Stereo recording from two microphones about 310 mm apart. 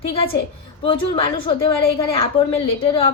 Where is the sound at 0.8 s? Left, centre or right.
Centre.